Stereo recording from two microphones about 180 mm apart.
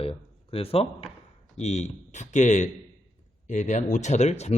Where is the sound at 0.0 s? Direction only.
30° left (ahead or behind).